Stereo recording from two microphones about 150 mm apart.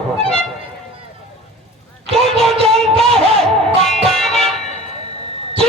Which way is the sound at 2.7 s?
5° left (ahead or behind).